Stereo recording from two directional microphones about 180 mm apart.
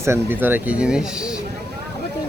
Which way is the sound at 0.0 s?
15° right (ahead or behind).